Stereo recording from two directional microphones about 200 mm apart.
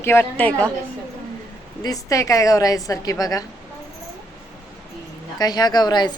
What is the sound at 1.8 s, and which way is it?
A woman's voice, 15° left (ahead or behind).